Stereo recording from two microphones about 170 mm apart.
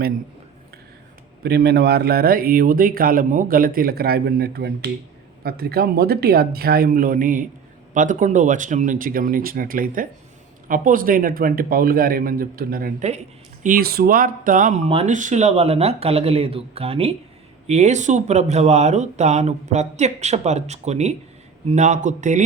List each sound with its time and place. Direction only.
1.5 s speech: 70° right (ahead or behind)
13.1 s speech: 45° right (ahead or behind)